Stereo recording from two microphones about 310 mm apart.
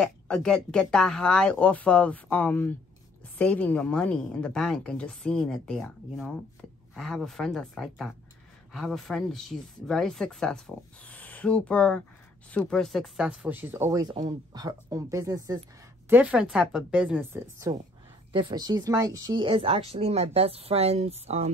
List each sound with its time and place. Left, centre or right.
0.0 s a woman's voice: centre; by 21.5 s right